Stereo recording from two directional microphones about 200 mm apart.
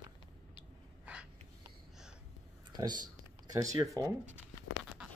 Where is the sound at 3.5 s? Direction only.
15° right (ahead or behind).